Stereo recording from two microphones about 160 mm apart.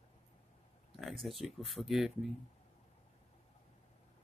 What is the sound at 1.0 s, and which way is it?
Speech, centre (ahead or behind).